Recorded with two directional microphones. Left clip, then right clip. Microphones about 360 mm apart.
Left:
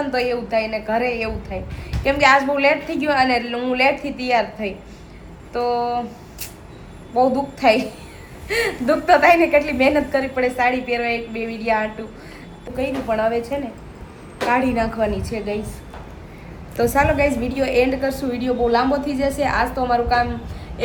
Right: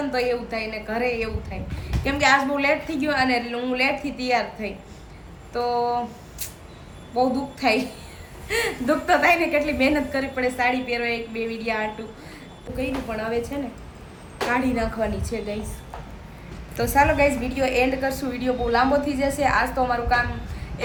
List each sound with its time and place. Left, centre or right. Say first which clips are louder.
0.1 s a woman's voice: left 4 dB; centre
7.6 s a woman's voice: left 6 dB; centre
14.5 s a woman's voice: left 5 dB; centre
16.7 s a woman's voice: left 2 dB; centre